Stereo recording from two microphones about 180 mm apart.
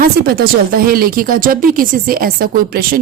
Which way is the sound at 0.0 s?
55° right (ahead or behind).